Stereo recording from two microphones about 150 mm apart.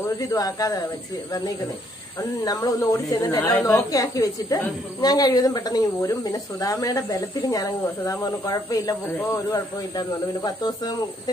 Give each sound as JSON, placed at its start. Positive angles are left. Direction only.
{"t": 0.3, "sound": "speech", "side_deg": 25}
{"t": 2.4, "sound": "speech", "side_deg": 25}